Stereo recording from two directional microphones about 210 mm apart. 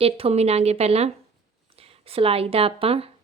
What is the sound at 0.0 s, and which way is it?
Speech, 30° right (ahead or behind).